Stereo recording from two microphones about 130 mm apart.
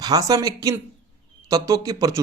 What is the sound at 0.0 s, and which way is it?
A man's voice, 30° right (ahead or behind).